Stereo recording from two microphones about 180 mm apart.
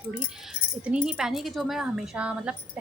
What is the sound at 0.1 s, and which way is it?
Speech, 5° right (ahead or behind).